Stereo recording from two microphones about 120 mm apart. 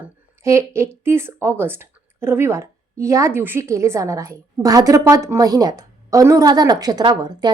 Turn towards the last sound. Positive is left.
turn(degrees=-35)  # may be behind; listen again after turning